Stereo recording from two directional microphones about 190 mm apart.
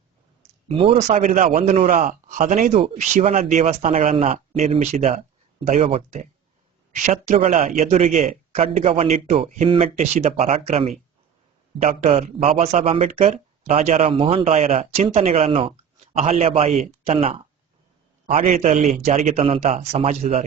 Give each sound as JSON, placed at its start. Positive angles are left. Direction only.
{"t": 0.7, "sound": "a man's voice", "side_deg": -30}